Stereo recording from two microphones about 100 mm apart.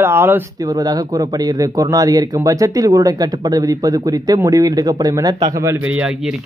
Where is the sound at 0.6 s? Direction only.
40° right (ahead or behind).